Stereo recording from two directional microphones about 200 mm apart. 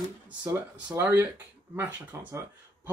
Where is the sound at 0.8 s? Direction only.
10° right (ahead or behind).